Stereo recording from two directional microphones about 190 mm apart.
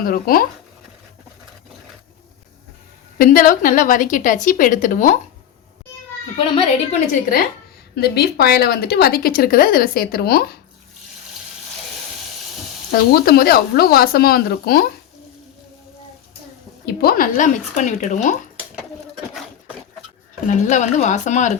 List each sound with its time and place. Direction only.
0.0 s a woman's voice: 50° left (ahead or behind)
3.2 s a woman's voice: 45° left (ahead or behind)
7.1 s a woman's voice: 50° left (ahead or behind)
12.9 s a woman's voice: 55° left (ahead or behind)
16.8 s speech: 55° left (ahead or behind)
20.5 s speech: 40° left (ahead or behind)